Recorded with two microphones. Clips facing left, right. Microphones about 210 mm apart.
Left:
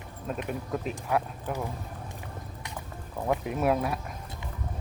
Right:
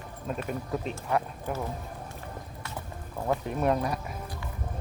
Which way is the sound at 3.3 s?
5° left (ahead or behind).